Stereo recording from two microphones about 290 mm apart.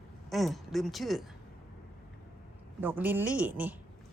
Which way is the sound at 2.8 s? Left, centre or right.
Centre.